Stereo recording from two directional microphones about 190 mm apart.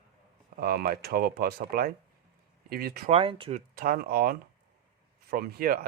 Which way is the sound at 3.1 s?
30° right (ahead or behind).